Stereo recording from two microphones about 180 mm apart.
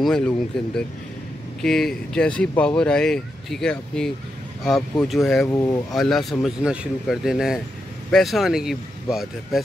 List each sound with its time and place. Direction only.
0.0 s speech: 5° left (ahead or behind)
5.5 s speech: 20° left (ahead or behind)
5.9 s speech: centre (ahead or behind)